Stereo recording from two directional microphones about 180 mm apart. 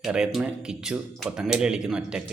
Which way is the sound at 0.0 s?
5° right (ahead or behind).